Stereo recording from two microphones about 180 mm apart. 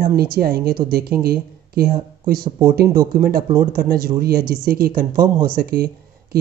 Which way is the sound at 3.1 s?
50° right (ahead or behind).